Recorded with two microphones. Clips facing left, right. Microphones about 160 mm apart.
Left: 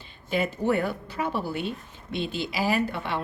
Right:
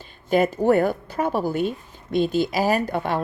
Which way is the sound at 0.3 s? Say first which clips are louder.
Right 7 dB; 45° right (ahead or behind).